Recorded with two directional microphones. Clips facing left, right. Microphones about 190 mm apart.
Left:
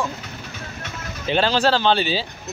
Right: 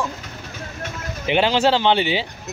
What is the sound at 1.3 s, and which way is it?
Speech, 15° right (ahead or behind).